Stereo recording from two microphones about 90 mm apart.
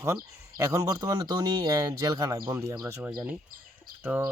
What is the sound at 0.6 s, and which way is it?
Speech, 40° right (ahead or behind).